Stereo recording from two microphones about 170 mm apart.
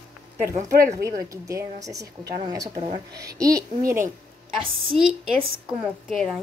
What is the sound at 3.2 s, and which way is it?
Speech, 20° right (ahead or behind).